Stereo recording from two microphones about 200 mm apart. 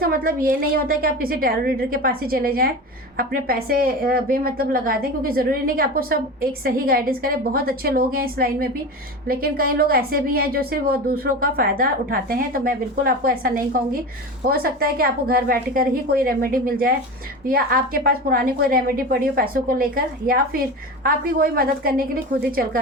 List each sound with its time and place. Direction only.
0.0 s a woman's voice: 45° right (ahead or behind)